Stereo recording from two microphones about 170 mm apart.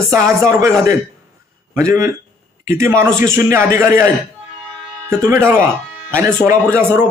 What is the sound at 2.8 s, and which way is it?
Speech, 15° right (ahead or behind).